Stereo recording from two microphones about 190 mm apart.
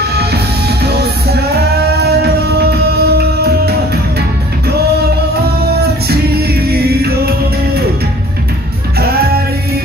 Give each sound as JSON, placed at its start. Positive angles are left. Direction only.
{"t": 0.0, "sound": "music", "side_deg": -60}
{"t": 6.0, "sound": "music", "side_deg": -55}
{"t": 8.9, "sound": "music", "side_deg": -55}